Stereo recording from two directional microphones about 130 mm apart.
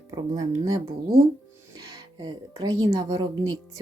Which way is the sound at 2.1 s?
30° right (ahead or behind).